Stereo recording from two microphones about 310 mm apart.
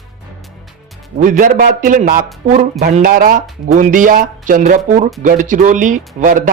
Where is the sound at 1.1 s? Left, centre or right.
Right.